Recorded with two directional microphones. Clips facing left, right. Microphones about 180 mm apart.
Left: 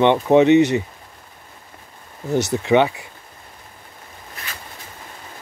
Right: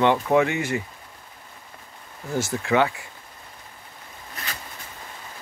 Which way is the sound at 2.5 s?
20° left (ahead or behind).